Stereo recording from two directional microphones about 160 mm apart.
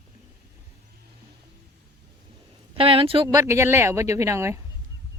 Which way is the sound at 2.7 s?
35° right (ahead or behind).